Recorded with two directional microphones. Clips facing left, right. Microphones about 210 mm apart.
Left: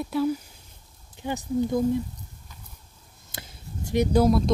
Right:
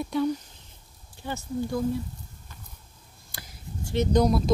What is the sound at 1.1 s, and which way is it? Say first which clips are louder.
Speech: left 5 dB; 15° left (ahead or behind).